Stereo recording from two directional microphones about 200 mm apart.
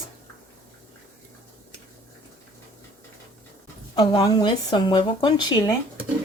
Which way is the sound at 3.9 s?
20° left (ahead or behind).